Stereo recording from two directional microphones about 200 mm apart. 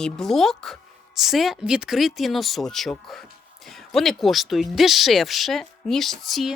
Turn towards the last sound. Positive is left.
turn(degrees=0)  # may be behind; listen again after turning